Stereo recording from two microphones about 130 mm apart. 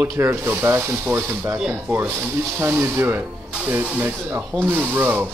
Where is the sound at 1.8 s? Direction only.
15° right (ahead or behind).